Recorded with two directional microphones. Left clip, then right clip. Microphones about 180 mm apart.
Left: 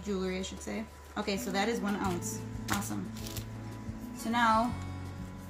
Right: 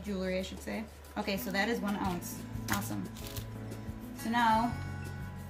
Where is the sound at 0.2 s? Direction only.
20° right (ahead or behind).